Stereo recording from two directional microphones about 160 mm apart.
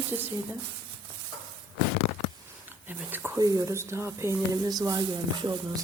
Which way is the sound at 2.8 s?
10° right (ahead or behind).